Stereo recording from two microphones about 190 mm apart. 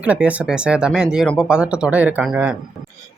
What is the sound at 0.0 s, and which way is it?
Speech, 5° right (ahead or behind).